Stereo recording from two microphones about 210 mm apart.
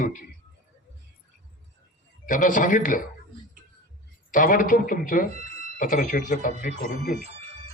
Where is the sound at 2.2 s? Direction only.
40° left (ahead or behind).